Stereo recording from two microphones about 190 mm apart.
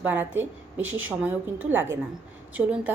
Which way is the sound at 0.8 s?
90° right.